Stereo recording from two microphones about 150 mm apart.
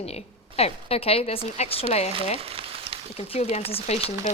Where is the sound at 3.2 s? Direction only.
40° left (ahead or behind).